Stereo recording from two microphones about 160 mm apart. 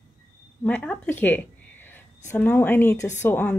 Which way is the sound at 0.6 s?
5° left (ahead or behind).